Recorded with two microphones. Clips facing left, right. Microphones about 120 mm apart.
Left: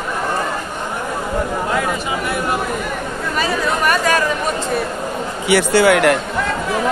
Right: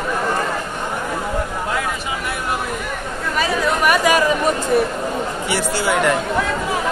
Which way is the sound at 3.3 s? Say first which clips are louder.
Even; 10° right (ahead or behind).